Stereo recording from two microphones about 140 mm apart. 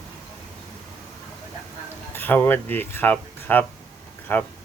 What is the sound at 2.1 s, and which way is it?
Speech, 15° left (ahead or behind).